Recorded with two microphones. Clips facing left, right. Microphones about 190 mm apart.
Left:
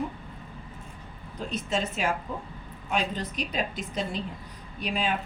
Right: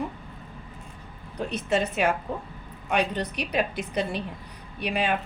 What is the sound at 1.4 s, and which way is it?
A woman's voice, 65° right (ahead or behind).